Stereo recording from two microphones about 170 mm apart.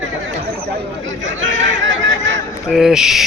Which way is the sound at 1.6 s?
90° right.